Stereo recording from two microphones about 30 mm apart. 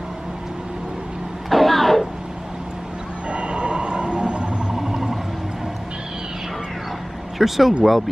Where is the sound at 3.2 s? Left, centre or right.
Right.